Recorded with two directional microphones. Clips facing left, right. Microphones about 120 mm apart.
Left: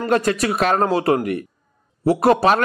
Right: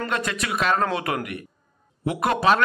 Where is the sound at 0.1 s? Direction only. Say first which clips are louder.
Left 8 dB; 40° left (ahead or behind).